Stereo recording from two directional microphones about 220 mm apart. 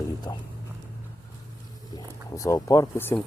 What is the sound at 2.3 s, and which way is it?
Speech, 15° left (ahead or behind).